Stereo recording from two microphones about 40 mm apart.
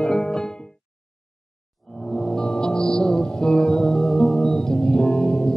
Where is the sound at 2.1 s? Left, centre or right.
Centre.